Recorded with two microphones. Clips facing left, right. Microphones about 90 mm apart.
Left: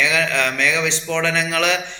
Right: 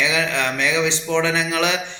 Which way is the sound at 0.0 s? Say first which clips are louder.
Left 1 dB; 20° right (ahead or behind).